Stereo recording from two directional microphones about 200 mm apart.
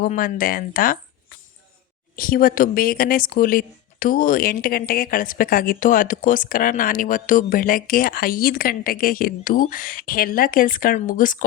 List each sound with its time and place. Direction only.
0.0 s speech: 45° left (ahead or behind)
2.1 s speech: 45° left (ahead or behind)